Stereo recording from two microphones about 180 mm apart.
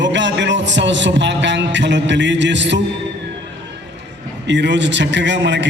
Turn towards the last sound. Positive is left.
turn(degrees=-75)  # may be behind; listen again after turning